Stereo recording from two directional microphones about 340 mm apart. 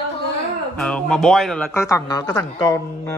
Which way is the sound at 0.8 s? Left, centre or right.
Centre.